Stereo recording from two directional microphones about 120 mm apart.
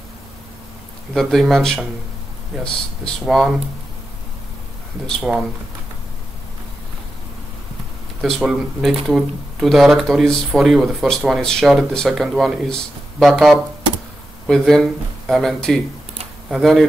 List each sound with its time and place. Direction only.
1.1 s speech: centre (ahead or behind)
5.0 s speech: 5° right (ahead or behind)
8.2 s speech: centre (ahead or behind)